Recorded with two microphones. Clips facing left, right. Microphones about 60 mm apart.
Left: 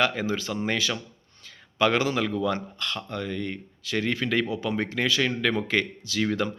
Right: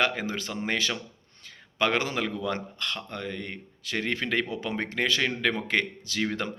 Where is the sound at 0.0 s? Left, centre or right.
Right.